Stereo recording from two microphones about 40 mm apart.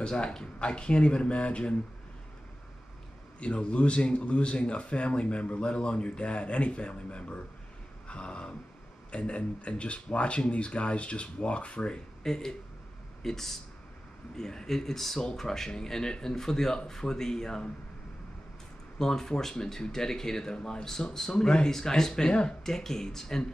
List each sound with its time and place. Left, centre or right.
0.0 s speech: left
3.3 s speech: left
12.2 s speech: centre
18.9 s speech: centre